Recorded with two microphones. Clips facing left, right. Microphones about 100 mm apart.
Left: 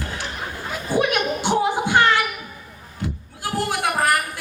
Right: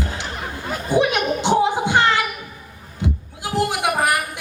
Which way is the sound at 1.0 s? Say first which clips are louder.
Right 1 dB; 20° right (ahead or behind).